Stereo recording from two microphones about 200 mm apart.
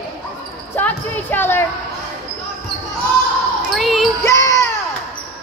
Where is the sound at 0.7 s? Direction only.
10° left (ahead or behind).